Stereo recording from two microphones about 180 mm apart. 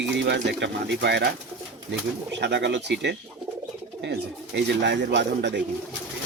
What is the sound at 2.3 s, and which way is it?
Speech, 75° right (ahead or behind).